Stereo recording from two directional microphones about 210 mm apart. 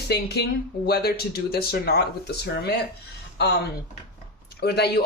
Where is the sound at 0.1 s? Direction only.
50° left (ahead or behind).